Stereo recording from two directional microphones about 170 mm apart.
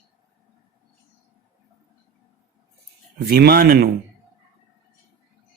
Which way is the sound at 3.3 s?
65° right (ahead or behind).